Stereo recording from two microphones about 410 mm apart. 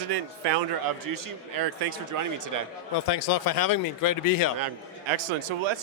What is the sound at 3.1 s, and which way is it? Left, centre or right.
Speech, left.